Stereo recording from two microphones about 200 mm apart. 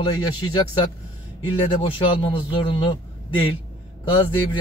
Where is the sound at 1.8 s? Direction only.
25° left (ahead or behind).